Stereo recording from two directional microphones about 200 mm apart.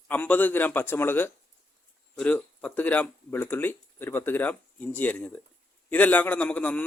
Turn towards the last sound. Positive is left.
turn(degrees=5)  # may be behind; listen again after turning